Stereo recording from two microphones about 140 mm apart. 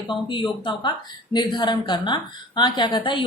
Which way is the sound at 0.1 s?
35° left (ahead or behind).